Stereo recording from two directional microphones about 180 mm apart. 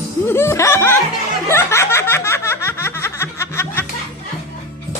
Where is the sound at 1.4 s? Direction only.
15° left (ahead or behind).